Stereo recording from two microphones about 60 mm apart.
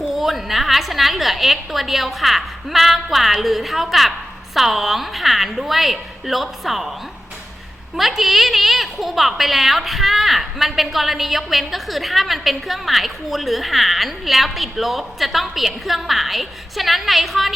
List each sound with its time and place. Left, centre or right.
0.0 s a woman's voice: centre
7.9 s a woman's voice: centre